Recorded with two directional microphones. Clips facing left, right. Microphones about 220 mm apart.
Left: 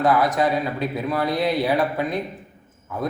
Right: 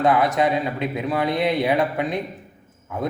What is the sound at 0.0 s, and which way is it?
Speech, 25° right (ahead or behind).